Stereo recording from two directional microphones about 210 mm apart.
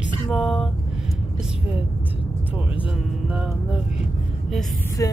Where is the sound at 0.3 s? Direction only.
Centre (ahead or behind).